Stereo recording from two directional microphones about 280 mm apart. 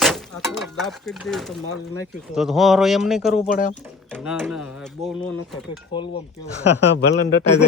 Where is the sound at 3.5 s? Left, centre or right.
Left.